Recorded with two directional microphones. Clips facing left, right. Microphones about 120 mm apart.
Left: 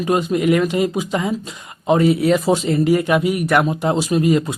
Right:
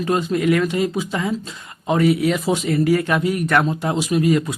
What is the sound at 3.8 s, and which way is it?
Speech, 30° left (ahead or behind).